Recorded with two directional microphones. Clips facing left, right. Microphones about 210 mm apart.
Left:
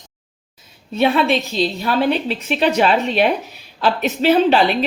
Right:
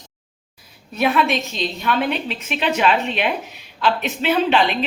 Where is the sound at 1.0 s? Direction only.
30° left (ahead or behind).